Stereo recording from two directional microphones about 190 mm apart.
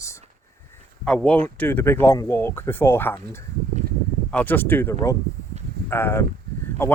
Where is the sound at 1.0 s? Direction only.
5° left (ahead or behind).